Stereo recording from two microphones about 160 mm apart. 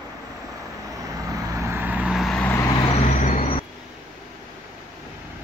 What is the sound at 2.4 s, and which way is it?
Vehicle, 15° left (ahead or behind).